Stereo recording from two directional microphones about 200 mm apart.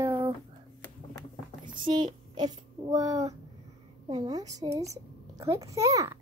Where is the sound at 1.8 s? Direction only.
20° right (ahead or behind).